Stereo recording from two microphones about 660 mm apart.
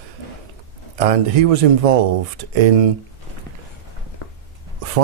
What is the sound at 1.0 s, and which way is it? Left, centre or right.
Speech, right.